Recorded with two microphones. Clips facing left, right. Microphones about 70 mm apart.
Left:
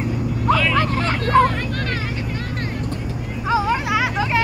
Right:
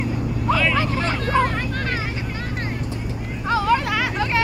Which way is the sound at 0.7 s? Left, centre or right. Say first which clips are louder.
Left 2 dB; left.